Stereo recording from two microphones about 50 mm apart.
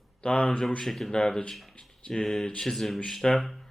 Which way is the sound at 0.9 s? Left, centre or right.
Centre.